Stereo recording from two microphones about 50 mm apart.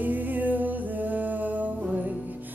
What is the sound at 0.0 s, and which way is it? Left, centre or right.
Music, right.